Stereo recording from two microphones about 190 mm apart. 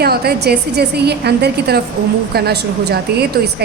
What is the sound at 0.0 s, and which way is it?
A woman's voice, 55° right (ahead or behind).